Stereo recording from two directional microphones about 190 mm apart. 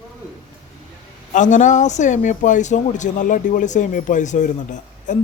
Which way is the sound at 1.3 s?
40° left (ahead or behind).